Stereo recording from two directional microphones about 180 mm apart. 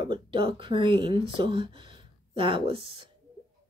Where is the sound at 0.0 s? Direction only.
25° right (ahead or behind).